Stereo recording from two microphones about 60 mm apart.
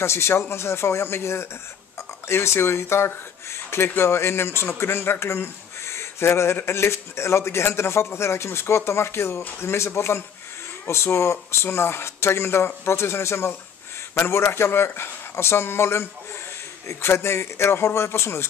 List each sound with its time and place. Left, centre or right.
0.0 s speech: left